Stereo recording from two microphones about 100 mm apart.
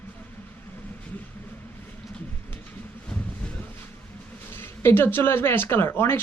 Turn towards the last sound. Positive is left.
turn(degrees=25)  # may be behind; listen again after turning